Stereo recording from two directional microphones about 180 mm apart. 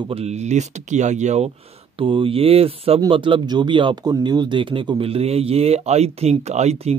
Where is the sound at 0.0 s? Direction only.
35° right (ahead or behind).